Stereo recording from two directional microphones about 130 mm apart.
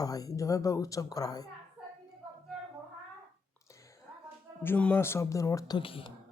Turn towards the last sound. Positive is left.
turn(degrees=45)  # may be behind; listen again after turning